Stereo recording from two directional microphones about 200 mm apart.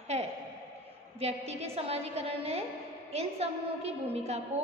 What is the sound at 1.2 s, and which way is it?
A woman's voice, 30° right (ahead or behind).